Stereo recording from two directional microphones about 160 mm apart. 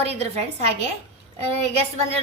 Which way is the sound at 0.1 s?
40° right (ahead or behind).